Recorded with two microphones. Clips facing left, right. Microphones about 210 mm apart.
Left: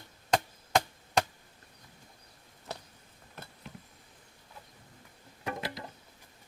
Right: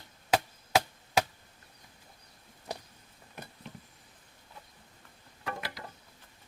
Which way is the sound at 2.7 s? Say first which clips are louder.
Right 2 dB; 15° right (ahead or behind).